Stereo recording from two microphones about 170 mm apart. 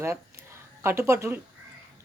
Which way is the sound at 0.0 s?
15° right (ahead or behind).